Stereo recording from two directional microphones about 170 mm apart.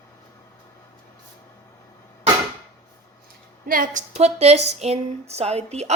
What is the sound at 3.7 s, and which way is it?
Speech, 55° right (ahead or behind).